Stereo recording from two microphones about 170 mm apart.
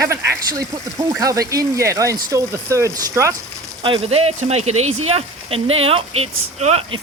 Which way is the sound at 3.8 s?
30° right (ahead or behind).